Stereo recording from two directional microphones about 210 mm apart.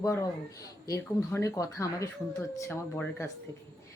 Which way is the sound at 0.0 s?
15° left (ahead or behind).